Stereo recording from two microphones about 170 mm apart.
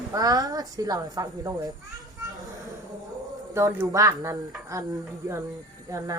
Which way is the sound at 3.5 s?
15° right (ahead or behind).